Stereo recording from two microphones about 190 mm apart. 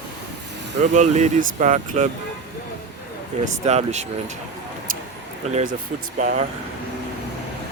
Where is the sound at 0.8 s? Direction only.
40° right (ahead or behind).